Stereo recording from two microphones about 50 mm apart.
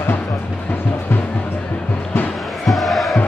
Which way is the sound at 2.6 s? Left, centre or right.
Centre.